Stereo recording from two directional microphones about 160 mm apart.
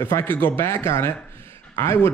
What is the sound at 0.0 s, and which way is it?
Speech, 15° left (ahead or behind).